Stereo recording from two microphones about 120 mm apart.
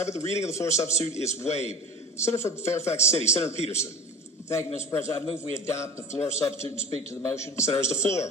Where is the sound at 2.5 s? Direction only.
20° left (ahead or behind).